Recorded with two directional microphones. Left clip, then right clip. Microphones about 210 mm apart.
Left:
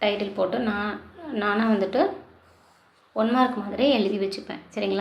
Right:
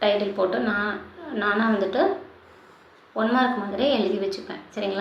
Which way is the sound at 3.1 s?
30° left (ahead or behind).